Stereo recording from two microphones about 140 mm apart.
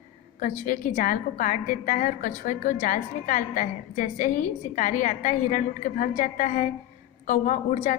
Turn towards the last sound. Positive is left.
turn(degrees=65)  # may be behind; listen again after turning